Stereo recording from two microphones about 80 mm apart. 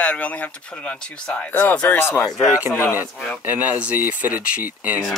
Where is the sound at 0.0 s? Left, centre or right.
Centre.